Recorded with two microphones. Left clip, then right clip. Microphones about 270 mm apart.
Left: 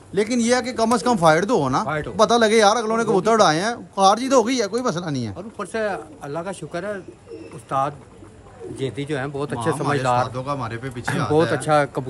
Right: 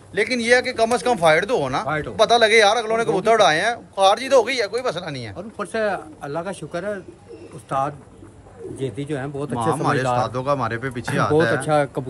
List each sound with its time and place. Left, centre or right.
0.1 s speech: centre
1.9 s speech: centre
2.1 s speech: centre
5.6 s speech: centre